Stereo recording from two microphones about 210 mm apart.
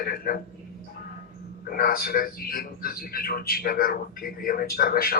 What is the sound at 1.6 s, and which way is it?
A man's voice, 45° left (ahead or behind).